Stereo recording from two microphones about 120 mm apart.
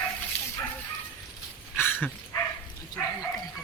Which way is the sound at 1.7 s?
15° left (ahead or behind).